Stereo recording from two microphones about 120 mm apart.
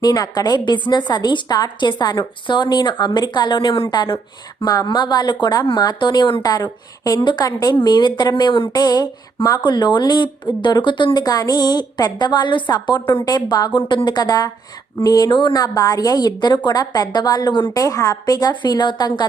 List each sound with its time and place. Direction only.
0.0 s speech: 35° left (ahead or behind)
4.6 s speech: 30° left (ahead or behind)
17.7 s speech: 30° left (ahead or behind)